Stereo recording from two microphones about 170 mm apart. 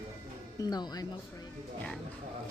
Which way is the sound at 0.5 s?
25° left (ahead or behind).